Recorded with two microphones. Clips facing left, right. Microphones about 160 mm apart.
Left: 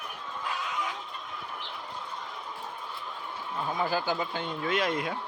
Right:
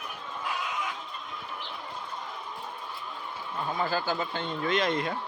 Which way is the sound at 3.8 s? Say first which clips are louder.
Even; 15° left (ahead or behind).